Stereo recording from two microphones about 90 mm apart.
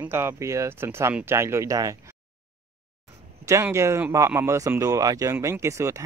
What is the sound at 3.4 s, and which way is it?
Speech, 35° right (ahead or behind).